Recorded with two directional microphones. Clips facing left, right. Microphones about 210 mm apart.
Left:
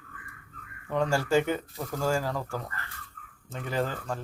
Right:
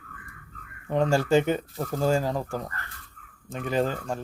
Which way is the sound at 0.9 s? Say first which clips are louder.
Right 4 dB; 20° right (ahead or behind).